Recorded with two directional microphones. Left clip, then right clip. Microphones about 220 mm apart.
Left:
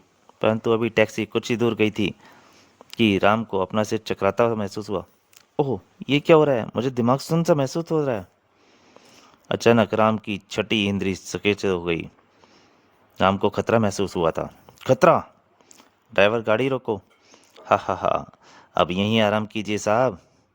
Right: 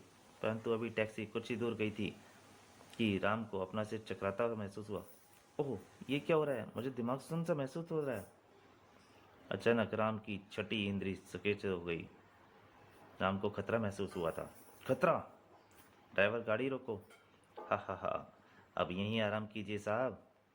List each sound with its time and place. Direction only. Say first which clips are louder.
0.4 s speech: left 17 dB; 55° left (ahead or behind)
6.1 s speech: left 18 dB; 55° left (ahead or behind)
9.5 s speech: left 16 dB; 55° left (ahead or behind)
13.1 s speech: left 17 dB; 55° left (ahead or behind)